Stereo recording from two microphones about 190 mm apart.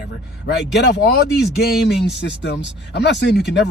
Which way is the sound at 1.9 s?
65° left (ahead or behind).